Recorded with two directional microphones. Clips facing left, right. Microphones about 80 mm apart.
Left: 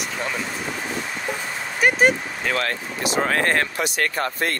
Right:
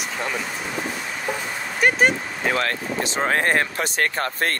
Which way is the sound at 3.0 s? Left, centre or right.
Right.